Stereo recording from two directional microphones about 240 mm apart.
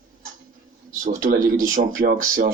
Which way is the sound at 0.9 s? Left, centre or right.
Right.